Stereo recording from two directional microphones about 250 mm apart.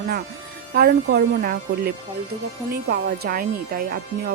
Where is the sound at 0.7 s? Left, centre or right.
Right.